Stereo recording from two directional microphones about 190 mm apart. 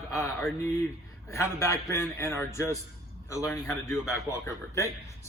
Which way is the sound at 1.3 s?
15° left (ahead or behind).